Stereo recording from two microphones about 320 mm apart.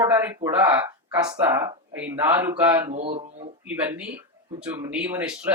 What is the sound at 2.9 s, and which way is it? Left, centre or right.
Speech, centre.